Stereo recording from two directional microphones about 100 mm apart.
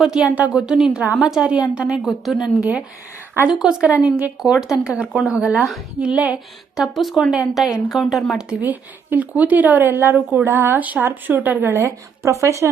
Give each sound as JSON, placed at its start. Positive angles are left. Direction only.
{"t": 0.0, "sound": "a woman's voice", "side_deg": -10}
{"t": 8.6, "sound": "a woman's voice", "side_deg": -15}